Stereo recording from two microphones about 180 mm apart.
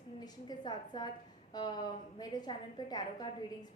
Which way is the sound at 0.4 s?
25° left (ahead or behind).